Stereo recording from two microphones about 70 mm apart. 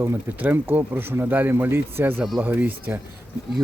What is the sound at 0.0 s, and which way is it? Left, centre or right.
A man's voice, right.